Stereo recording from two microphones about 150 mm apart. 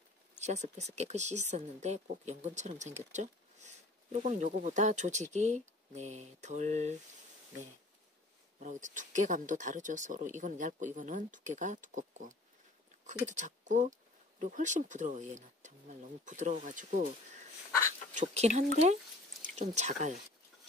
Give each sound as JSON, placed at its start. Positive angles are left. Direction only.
{"t": 0.4, "sound": "speech", "side_deg": -50}
{"t": 8.5, "sound": "speech", "side_deg": -55}
{"t": 18.1, "sound": "speech", "side_deg": -45}